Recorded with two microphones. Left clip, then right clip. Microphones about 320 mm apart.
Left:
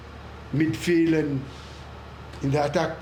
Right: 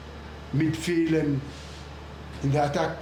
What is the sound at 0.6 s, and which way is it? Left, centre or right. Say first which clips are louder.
Speech: left 3 dB; left.